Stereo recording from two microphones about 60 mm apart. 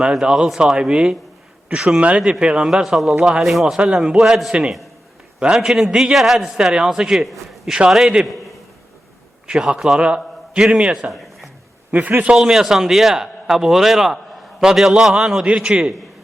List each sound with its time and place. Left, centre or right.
0.0 s a man's voice: centre
2.8 s a man's voice: centre
3.8 s a man's voice: centre
7.3 s a sound: centre
7.9 s a man's voice: centre
9.5 s a man's voice: centre
11.1 s a sound: centre
11.9 s a man's voice: right
12.4 s a man's voice: centre